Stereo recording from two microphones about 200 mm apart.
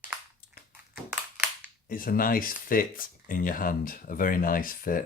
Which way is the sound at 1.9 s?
45° left (ahead or behind).